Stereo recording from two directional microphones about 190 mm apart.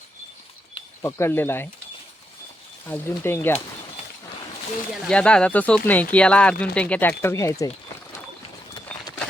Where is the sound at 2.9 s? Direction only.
10° left (ahead or behind).